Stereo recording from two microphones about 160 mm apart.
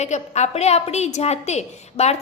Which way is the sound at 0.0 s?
45° left (ahead or behind).